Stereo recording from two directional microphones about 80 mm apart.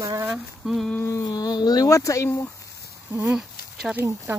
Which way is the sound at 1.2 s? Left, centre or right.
Left.